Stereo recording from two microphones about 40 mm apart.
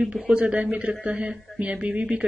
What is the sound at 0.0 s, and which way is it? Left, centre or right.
Speech, right.